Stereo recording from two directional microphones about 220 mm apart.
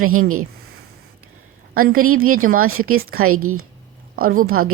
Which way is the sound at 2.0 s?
75° right (ahead or behind).